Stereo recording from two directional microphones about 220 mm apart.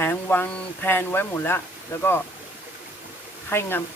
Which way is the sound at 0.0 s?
10° left (ahead or behind).